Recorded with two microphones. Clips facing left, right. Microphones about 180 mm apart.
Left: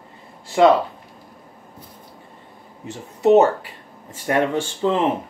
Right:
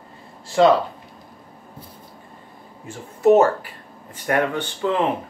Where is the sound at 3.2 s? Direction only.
20° left (ahead or behind).